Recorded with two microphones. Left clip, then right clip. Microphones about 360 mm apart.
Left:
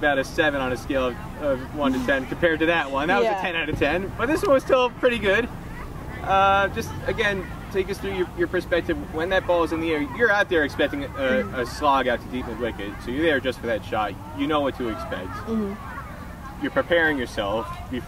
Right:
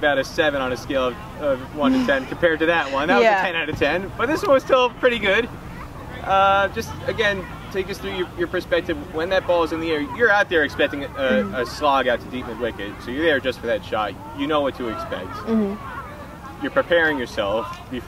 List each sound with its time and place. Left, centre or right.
0.0 s speech: centre
3.2 s speech: right
3.4 s speech: centre
15.5 s speech: right
16.6 s speech: centre